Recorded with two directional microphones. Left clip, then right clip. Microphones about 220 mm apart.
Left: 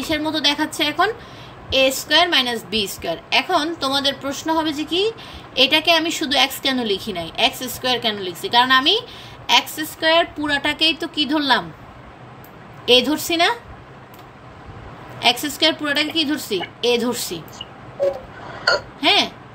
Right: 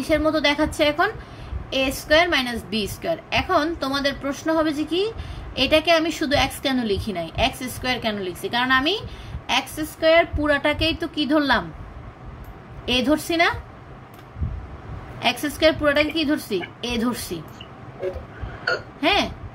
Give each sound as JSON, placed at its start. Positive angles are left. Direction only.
{"t": 0.0, "sound": "a woman's voice", "side_deg": -30}
{"t": 12.8, "sound": "a woman's voice", "side_deg": -30}
{"t": 15.1, "sound": "a woman's voice", "side_deg": -30}
{"t": 18.9, "sound": "a woman's voice", "side_deg": -30}